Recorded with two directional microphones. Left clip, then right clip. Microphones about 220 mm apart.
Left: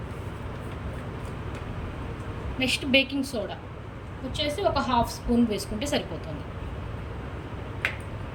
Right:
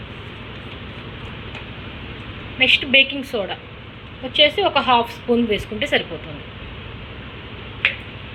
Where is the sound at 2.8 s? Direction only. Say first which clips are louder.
Right 8 dB; 10° left (ahead or behind).